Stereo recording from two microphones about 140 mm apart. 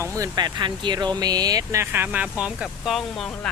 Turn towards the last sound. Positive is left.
turn(degrees=0)  # may be behind; listen again after turning